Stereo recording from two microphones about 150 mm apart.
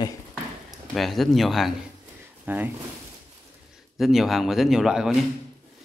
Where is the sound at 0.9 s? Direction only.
Centre (ahead or behind).